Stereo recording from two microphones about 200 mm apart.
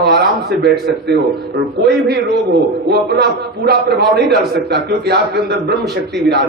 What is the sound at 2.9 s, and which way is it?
A man's voice, 55° right (ahead or behind).